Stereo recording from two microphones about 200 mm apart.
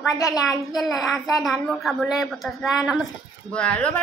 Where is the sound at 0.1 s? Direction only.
15° left (ahead or behind).